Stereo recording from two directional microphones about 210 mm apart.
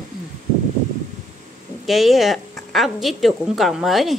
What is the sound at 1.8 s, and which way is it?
A woman's voice, centre (ahead or behind).